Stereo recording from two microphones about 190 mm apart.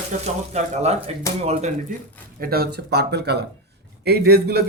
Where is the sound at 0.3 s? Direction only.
35° right (ahead or behind).